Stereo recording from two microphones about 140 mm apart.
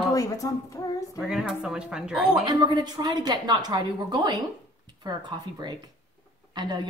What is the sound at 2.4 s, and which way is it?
A woman's voice, 30° right (ahead or behind).